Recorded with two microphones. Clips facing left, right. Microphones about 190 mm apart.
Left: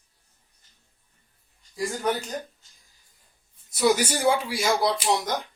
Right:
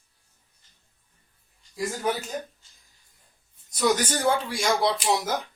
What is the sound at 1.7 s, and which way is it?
Speech, centre (ahead or behind).